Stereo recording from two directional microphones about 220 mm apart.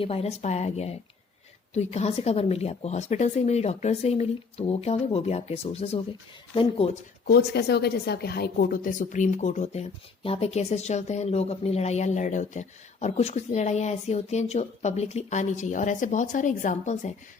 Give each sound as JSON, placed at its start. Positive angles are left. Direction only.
{"t": 0.0, "sound": "speech", "side_deg": 30}
{"t": 7.3, "sound": "a woman's voice", "side_deg": 45}